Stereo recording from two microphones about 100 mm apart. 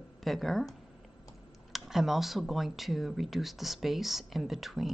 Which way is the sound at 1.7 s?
5° right (ahead or behind).